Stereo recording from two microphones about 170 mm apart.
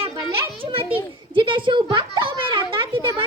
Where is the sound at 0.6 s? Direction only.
30° right (ahead or behind).